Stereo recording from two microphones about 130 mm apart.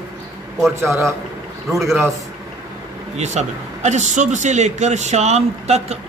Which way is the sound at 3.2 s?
60° right (ahead or behind).